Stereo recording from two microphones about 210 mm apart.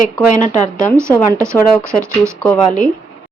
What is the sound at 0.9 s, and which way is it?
Speech, 15° right (ahead or behind).